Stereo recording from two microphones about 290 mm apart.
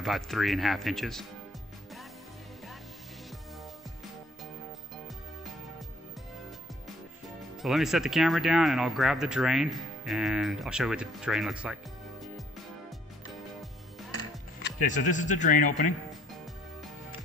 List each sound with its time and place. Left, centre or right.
0.0 s speech: centre
7.6 s speech: centre
14.6 s speech: left